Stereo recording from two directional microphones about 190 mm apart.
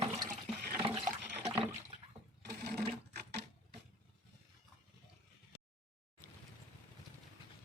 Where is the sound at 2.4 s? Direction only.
60° right (ahead or behind).